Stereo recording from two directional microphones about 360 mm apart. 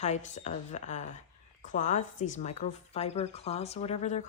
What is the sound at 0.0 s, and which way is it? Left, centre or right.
Speech, centre.